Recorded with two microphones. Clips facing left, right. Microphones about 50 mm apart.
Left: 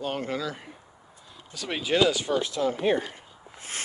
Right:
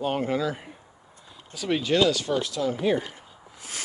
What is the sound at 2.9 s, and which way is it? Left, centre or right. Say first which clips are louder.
Speech: even; left.